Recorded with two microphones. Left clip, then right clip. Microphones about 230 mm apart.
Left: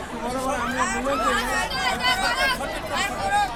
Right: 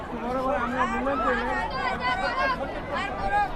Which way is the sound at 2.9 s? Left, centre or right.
Centre.